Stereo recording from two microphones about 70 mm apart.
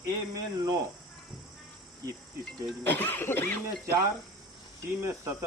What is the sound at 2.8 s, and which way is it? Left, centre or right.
Speech, left.